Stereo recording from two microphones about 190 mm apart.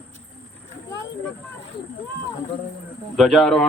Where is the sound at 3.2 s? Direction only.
Centre (ahead or behind).